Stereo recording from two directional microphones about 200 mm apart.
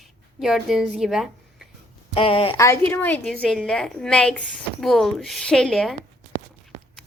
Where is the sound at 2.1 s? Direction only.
30° left (ahead or behind).